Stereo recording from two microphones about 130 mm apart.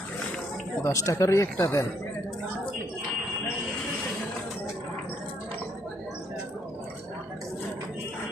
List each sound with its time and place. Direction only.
0.9 s speech: 25° left (ahead or behind)